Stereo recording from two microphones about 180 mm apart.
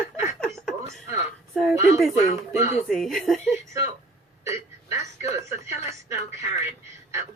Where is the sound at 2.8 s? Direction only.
Centre (ahead or behind).